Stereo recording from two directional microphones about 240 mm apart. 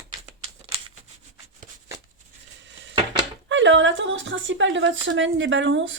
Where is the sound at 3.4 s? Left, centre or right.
Right.